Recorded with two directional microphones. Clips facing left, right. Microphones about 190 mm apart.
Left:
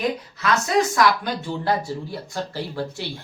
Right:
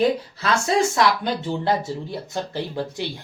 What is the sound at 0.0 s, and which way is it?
Speech, 30° right (ahead or behind).